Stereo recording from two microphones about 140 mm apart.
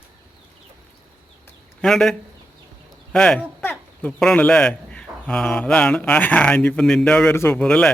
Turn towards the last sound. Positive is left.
turn(degrees=5)  # may be behind; listen again after turning